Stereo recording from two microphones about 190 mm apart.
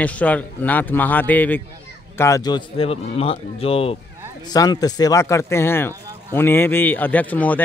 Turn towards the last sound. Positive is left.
turn(degrees=10)  # may be behind; listen again after turning